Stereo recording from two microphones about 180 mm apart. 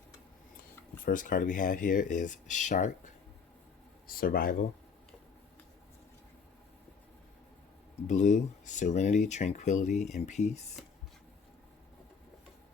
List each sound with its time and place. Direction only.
1.0 s speech: 50° left (ahead or behind)
4.0 s speech: 55° left (ahead or behind)
8.0 s speech: 40° left (ahead or behind)